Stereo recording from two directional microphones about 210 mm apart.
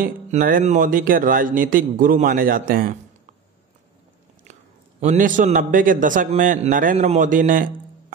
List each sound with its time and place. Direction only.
0.0 s speech: 40° right (ahead or behind)
5.0 s speech: 40° right (ahead or behind)